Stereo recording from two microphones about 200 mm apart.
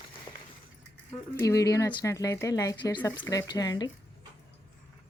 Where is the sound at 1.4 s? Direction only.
15° left (ahead or behind).